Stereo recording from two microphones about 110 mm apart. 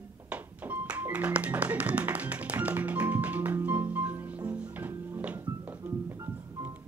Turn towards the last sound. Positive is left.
turn(degrees=-20)  # may be behind; listen again after turning